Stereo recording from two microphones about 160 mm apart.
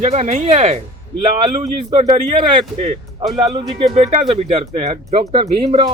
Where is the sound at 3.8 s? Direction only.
45° right (ahead or behind).